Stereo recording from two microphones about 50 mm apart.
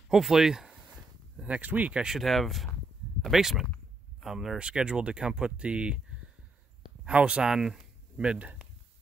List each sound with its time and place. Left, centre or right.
0.1 s a sound: centre
1.4 s speech: right
2.1 s speech: centre
4.6 s speech: centre
7.1 s speech: right
7.4 s speech: centre
8.2 s speech: centre